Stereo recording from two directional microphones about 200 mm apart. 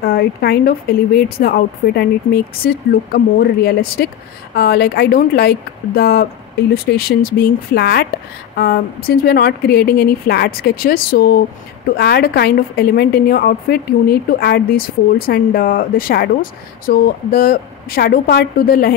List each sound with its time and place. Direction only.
0.0 s a woman's voice: 50° left (ahead or behind)